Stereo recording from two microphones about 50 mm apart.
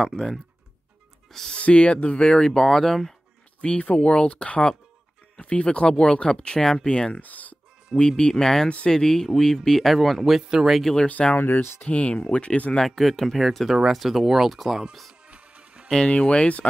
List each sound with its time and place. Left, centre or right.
0.0 s speech: centre
1.5 s speech: left; by 3.2 s centre
3.6 s speech: left
7.2 s speech: left
8.2 s speech: centre
8.6 s speech: left
8.9 s speech: centre
10.8 s speech: centre
11.3 s speech: left
11.8 s speech: left
12.7 s speech: centre
15.2 s music: right
16.1 s speech: left